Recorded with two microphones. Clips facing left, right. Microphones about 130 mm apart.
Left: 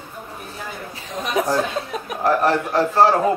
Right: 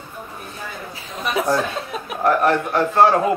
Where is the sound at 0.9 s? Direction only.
40° left (ahead or behind).